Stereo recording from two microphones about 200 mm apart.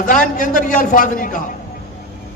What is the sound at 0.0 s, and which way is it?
A man's voice, 40° left (ahead or behind).